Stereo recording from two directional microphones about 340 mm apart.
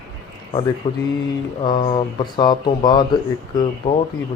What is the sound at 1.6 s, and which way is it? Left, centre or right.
Speech, centre.